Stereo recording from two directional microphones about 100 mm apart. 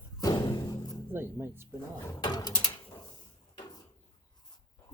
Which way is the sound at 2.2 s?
45° left (ahead or behind).